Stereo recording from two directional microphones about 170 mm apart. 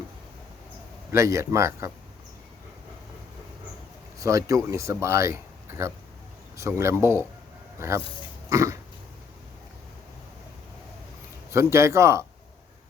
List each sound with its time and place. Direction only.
1.1 s speech: 15° right (ahead or behind)
4.2 s speech: 20° right (ahead or behind)
8.4 s a sound: 20° right (ahead or behind)
11.5 s speech: 15° right (ahead or behind)